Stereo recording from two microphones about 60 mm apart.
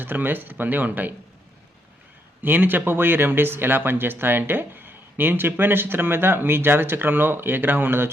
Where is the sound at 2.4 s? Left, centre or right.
Right.